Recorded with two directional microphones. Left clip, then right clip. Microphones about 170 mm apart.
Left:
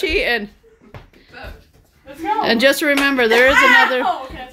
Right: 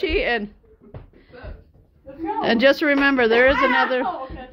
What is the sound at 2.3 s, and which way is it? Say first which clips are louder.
Speech: left 2 dB; 15° left (ahead or behind).